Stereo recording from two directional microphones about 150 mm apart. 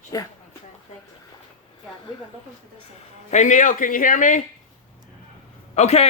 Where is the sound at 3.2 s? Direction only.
55° left (ahead or behind).